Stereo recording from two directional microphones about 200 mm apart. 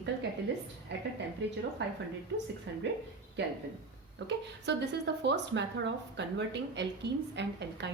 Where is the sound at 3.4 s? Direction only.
60° right (ahead or behind).